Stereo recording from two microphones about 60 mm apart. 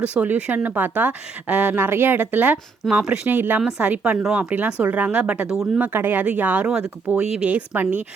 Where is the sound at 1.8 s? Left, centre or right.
Right.